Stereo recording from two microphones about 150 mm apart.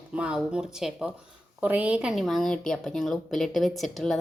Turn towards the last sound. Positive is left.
turn(degrees=0)  # may be behind; listen again after turning